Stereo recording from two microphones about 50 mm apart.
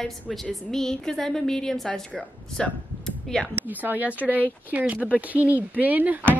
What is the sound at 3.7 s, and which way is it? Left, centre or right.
Speech, right.